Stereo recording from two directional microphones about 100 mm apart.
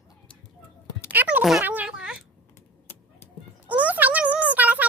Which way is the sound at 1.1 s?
15° right (ahead or behind).